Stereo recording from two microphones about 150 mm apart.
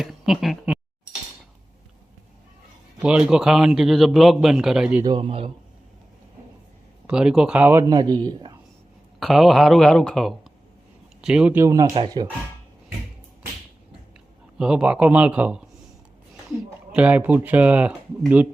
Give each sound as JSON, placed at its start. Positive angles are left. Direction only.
{"t": 0.0, "sound": "speech", "side_deg": 0}
{"t": 3.0, "sound": "a man's voice", "side_deg": -5}
{"t": 5.0, "sound": "a man's voice", "side_deg": -30}
{"t": 7.1, "sound": "a man's voice", "side_deg": -5}
{"t": 9.2, "sound": "a man's voice", "side_deg": 0}
{"t": 14.6, "sound": "a man's voice", "side_deg": -5}
{"t": 16.9, "sound": "a man's voice", "side_deg": -10}